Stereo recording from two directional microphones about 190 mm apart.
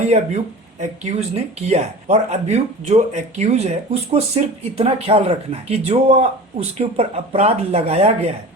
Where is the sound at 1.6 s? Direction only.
35° right (ahead or behind).